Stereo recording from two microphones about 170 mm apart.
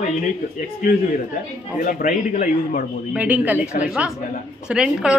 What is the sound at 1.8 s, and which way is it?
A man's voice, 55° left (ahead or behind).